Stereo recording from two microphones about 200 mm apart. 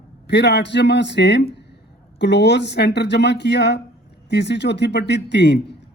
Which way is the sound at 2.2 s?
60° left (ahead or behind).